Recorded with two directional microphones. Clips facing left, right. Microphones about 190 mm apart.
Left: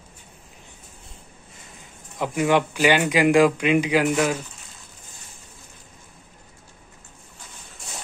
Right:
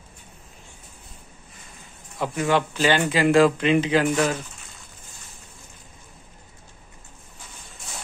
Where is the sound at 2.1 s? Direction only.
15° left (ahead or behind).